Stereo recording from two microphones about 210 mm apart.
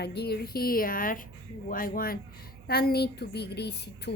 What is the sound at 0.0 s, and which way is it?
A woman's voice, 50° left (ahead or behind).